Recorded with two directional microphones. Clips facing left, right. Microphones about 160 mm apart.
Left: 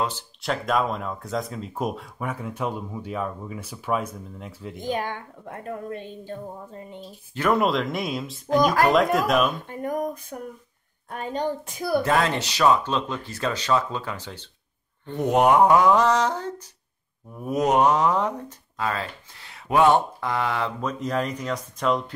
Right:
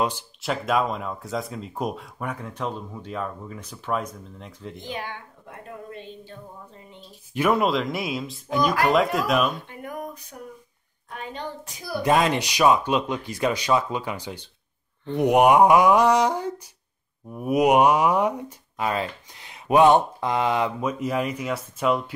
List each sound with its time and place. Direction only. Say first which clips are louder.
0.4 s speech: even; 5° right (ahead or behind)
4.7 s a woman's voice: left 7 dB; 45° left (ahead or behind)
7.3 s speech: even; 5° right (ahead or behind)
9.7 s a woman's voice: left 7 dB; 40° left (ahead or behind)
12.0 s speech: right 6 dB; 15° right (ahead or behind)